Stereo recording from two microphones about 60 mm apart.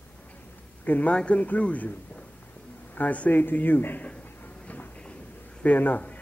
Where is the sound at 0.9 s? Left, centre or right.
Left.